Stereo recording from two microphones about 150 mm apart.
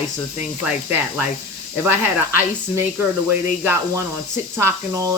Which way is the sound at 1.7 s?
15° right (ahead or behind).